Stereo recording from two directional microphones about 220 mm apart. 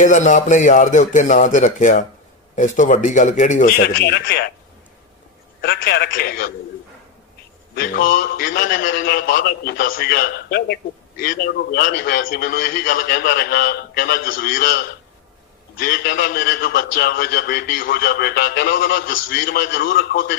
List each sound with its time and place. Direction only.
0.0 s a man's voice: 35° left (ahead or behind)
5.6 s a man's voice: 45° left (ahead or behind)
7.8 s a man's voice: 40° left (ahead or behind)
9.0 s a man's voice: 50° left (ahead or behind)
15.8 s a man's voice: 40° left (ahead or behind)